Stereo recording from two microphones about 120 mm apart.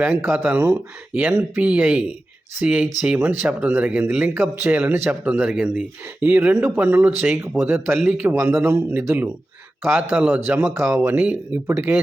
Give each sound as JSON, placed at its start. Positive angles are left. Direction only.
{"t": 0.0, "sound": "speech", "side_deg": -15}